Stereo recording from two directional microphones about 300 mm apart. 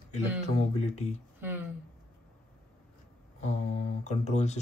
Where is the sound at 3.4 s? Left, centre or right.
Left.